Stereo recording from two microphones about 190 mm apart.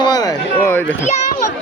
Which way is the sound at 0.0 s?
20° left (ahead or behind).